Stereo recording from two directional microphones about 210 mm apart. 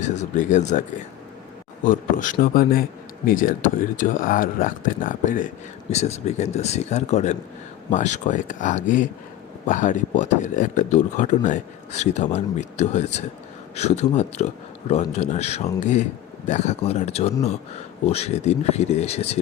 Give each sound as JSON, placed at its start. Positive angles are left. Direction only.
{"t": 0.0, "sound": "speech", "side_deg": 35}
{"t": 1.8, "sound": "speech", "side_deg": 40}